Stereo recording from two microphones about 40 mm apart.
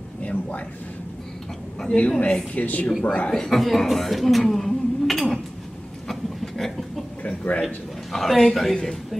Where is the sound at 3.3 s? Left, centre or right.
Centre.